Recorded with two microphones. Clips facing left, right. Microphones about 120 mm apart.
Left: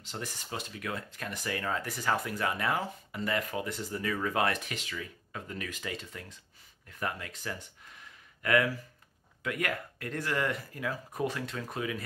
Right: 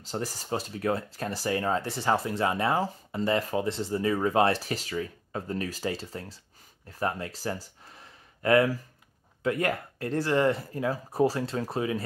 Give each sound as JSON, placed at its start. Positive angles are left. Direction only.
{"t": 0.0, "sound": "speech", "side_deg": -35}